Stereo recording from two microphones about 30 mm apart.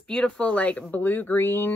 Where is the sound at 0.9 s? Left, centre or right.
Left.